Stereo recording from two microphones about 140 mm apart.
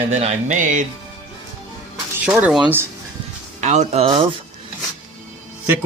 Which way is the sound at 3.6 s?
55° right (ahead or behind).